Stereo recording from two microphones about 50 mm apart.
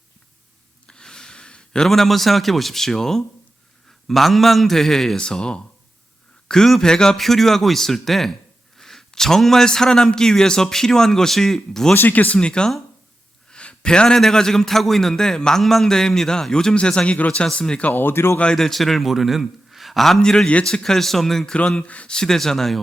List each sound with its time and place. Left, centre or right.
0.9 s a sound: centre
1.9 s a man's voice: centre
7.2 s a man's voice: centre
11.9 s speech: left
12.4 s a man's voice: centre
13.5 s a sound: centre
14.2 s a man's voice: centre
17.8 s speech: left
18.5 s a man's voice: centre
20.2 s a man's voice: centre
21.5 s speech: left
22.1 s a man's voice: centre